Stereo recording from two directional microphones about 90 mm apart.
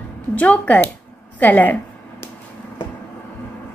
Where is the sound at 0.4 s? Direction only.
15° left (ahead or behind).